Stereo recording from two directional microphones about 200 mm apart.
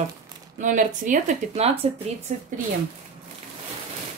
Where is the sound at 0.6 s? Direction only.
40° right (ahead or behind).